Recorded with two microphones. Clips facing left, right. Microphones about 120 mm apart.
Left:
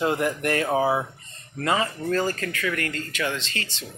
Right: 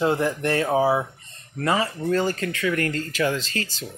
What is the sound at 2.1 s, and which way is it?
Speech, 20° right (ahead or behind).